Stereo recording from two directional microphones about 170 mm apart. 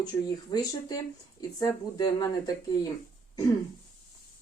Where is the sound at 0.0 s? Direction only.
25° left (ahead or behind).